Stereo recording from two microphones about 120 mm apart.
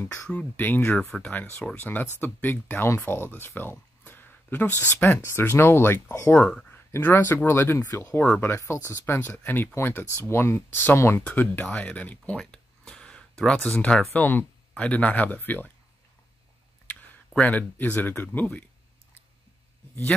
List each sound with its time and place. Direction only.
0.0 s speech: 15° left (ahead or behind)
6.4 s speech: 5° left (ahead or behind)
16.8 s speech: 15° left (ahead or behind)